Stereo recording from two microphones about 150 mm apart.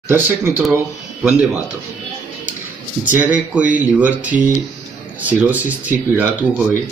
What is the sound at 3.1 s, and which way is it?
Speech, 10° right (ahead or behind).